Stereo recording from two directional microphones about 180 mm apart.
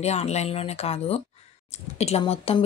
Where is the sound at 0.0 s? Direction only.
35° left (ahead or behind).